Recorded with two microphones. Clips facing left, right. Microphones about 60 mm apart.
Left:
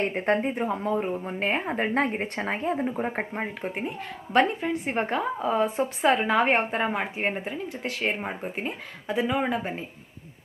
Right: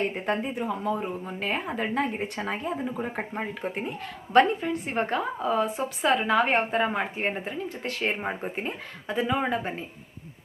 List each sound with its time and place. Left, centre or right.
0.1 s a woman's voice: left
2.0 s a woman's voice: left
3.3 s speech: centre
4.7 s speech: centre
5.6 s speech: left; by 9.7 s centre